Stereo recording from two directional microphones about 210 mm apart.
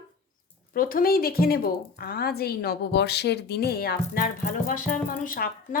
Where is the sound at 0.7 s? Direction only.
40° left (ahead or behind).